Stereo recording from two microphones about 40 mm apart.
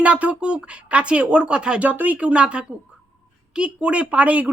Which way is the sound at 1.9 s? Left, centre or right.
Right.